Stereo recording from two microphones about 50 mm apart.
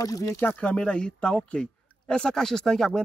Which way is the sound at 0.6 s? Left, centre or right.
Centre.